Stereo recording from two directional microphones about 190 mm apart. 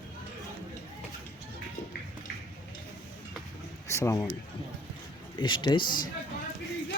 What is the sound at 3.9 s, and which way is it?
Speech, 15° left (ahead or behind).